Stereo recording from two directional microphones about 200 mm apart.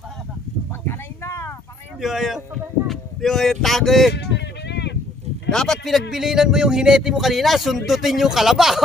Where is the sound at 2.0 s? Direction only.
Centre (ahead or behind).